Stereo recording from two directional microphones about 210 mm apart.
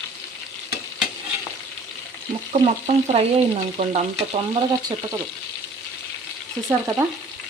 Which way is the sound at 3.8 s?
30° right (ahead or behind).